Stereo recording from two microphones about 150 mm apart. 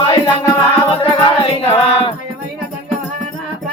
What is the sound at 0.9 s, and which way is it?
Music, 35° left (ahead or behind).